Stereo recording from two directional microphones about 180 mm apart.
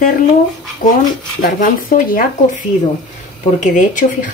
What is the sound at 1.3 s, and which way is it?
Speech, 50° left (ahead or behind).